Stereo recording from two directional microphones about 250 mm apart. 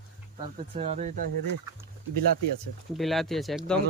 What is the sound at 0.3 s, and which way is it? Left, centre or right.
Speech, right.